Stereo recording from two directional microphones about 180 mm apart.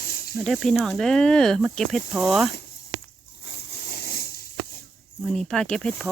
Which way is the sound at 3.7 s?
60° left (ahead or behind).